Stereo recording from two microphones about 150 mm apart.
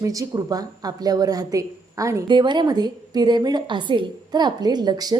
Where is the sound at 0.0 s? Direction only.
20° right (ahead or behind).